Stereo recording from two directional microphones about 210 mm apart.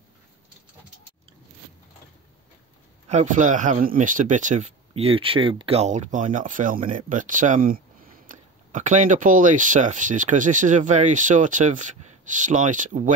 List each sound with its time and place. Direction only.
3.1 s speech: 35° right (ahead or behind)